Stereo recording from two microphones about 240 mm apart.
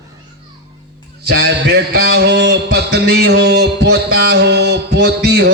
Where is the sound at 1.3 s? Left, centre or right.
Right.